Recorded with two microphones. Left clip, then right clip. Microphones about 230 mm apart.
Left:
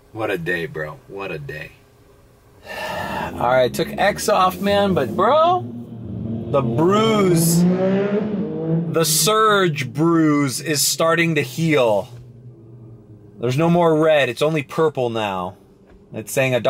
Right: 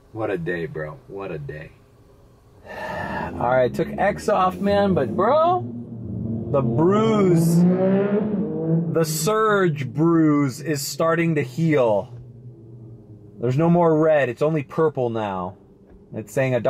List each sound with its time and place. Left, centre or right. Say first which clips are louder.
0.1 s speech: left 3 dB; centre
2.6 s gasp: left 3 dB; centre
3.4 s speech: left 3 dB; centre
6.2 s vehicle: left 1 dB; right
7.4 s vehicle: left 1 dB; centre
10.0 s speech: left 1 dB; centre
13.4 s speech: left 2 dB; centre